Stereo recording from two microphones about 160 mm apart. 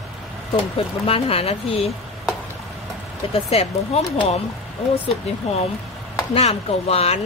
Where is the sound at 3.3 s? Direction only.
40° left (ahead or behind).